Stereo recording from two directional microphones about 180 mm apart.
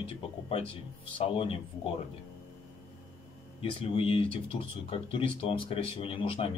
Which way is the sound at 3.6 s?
30° left (ahead or behind).